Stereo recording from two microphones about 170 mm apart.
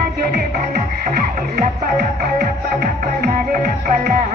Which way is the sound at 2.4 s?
55° right (ahead or behind).